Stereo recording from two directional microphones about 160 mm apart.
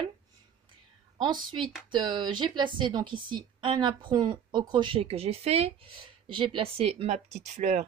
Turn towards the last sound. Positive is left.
turn(degrees=-50)  # may be behind; listen again after turning